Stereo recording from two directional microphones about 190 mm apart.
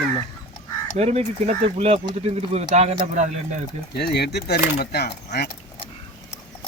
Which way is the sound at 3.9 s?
60° left (ahead or behind).